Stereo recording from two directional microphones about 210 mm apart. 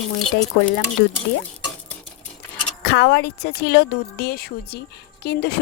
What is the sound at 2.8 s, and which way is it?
Speech, 55° left (ahead or behind).